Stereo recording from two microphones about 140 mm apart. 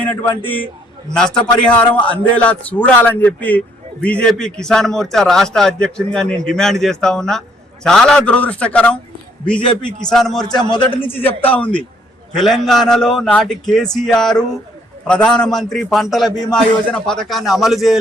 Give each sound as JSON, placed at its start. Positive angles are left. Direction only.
{"t": 0.0, "sound": "a man's voice", "side_deg": 10}
{"t": 10.1, "sound": "a man's voice", "side_deg": 5}
{"t": 10.7, "sound": "a man's voice", "side_deg": 35}
{"t": 11.4, "sound": "a man's voice", "side_deg": 10}